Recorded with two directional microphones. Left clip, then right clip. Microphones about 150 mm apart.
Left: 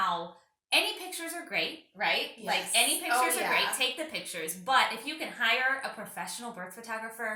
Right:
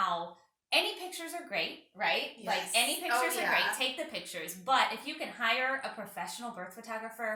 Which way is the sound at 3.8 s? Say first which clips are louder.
Left 3 dB; 10° right (ahead or behind).